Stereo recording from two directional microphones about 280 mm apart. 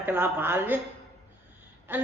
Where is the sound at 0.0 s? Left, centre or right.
Centre.